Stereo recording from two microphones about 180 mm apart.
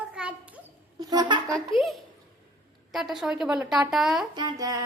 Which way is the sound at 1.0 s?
20° right (ahead or behind).